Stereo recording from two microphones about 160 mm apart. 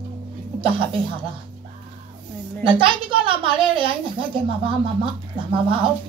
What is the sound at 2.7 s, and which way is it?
A woman's voice, 30° right (ahead or behind).